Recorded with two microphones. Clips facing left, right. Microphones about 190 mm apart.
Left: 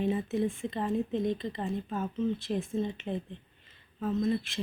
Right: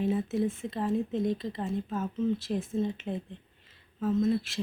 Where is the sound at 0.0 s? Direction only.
Centre (ahead or behind).